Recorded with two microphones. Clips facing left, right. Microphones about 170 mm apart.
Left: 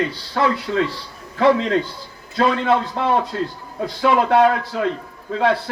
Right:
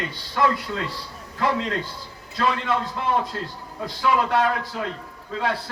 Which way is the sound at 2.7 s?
65° left (ahead or behind).